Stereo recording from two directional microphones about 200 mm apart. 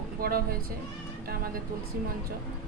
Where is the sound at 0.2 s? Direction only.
50° right (ahead or behind).